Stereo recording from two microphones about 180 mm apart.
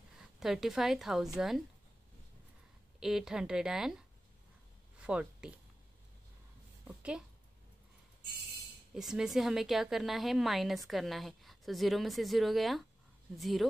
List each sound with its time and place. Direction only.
0.4 s a woman's voice: centre (ahead or behind)
3.0 s a woman's voice: 5° right (ahead or behind)
5.0 s speech: 5° right (ahead or behind)
6.9 s a woman's voice: 5° right (ahead or behind)
8.9 s a woman's voice: 5° right (ahead or behind)